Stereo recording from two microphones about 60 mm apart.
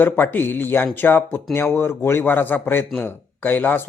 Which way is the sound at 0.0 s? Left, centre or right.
Left.